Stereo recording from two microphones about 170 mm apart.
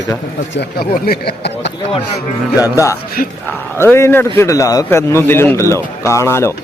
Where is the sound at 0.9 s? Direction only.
65° left (ahead or behind).